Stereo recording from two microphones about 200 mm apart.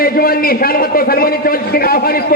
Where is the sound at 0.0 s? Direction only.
50° left (ahead or behind).